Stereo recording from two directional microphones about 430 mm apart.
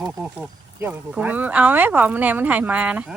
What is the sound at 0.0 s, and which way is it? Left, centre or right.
Speech, centre.